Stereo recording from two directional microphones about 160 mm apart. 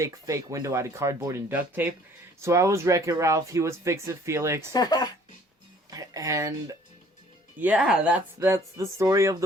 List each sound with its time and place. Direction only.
0.0 s speech: 20° right (ahead or behind)
4.7 s speech: 25° left (ahead or behind)
5.9 s speech: 20° right (ahead or behind)
7.6 s speech: 10° right (ahead or behind)
8.4 s speech: 20° right (ahead or behind)